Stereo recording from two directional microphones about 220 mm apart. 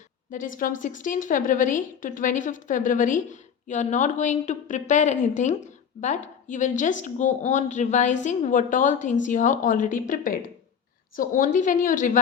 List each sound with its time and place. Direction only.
0.3 s a woman's voice: 35° left (ahead or behind)